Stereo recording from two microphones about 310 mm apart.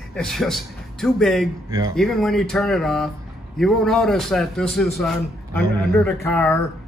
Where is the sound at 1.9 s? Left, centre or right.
Centre.